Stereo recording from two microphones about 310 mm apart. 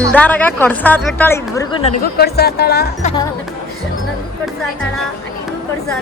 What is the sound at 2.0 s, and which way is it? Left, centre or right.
Speech, left.